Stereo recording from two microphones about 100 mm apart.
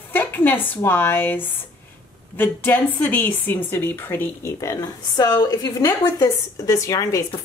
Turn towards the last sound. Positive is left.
turn(degrees=35)  # may be behind; listen again after turning